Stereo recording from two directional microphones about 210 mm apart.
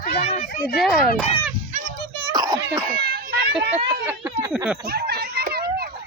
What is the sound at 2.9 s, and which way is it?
Children playing, 50° right (ahead or behind).